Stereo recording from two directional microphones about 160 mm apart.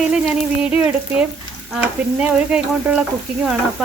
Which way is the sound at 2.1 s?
5° right (ahead or behind).